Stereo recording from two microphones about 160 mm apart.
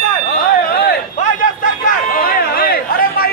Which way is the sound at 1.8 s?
60° left (ahead or behind).